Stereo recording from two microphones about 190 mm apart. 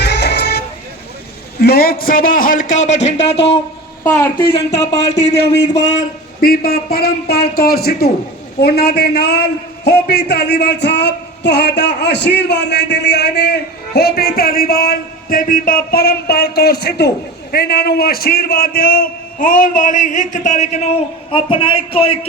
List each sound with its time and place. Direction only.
0.0 s music: 60° left (ahead or behind)
1.5 s a man's voice: 55° left (ahead or behind); by 3.3 s 35° left (ahead or behind)
4.0 s speech: 15° left (ahead or behind)
4.4 s speech: 25° left (ahead or behind)
6.4 s a man's voice: 50° left (ahead or behind); by 22.3 s 30° left (ahead or behind)